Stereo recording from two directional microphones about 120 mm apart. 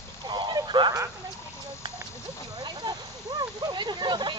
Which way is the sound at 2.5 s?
35° right (ahead or behind).